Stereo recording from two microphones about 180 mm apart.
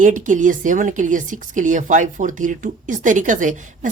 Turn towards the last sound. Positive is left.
turn(degrees=-45)  # may be behind; listen again after turning